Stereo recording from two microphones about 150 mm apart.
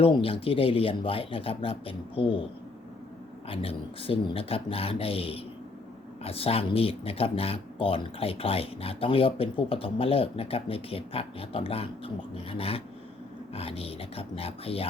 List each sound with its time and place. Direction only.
0.0 s speech: 40° left (ahead or behind)
3.5 s speech: 40° left (ahead or behind)